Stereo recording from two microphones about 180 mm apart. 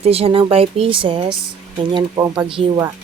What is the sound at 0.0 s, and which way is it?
Speech, 35° right (ahead or behind).